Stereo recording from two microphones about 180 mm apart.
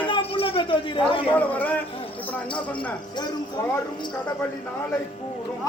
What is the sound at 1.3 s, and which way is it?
Speech, 10° left (ahead or behind).